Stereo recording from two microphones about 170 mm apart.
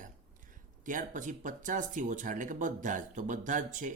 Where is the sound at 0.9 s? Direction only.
50° right (ahead or behind).